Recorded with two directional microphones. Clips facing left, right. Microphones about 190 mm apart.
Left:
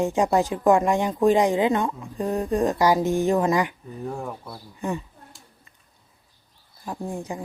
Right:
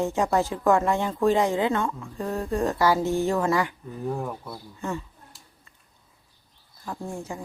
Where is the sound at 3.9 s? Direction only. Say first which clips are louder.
Right 1 dB; centre (ahead or behind).